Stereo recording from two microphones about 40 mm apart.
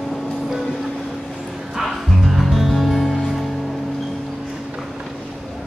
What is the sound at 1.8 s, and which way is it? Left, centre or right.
Music, centre.